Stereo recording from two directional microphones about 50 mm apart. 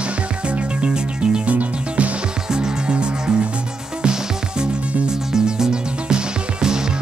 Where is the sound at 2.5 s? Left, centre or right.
Centre.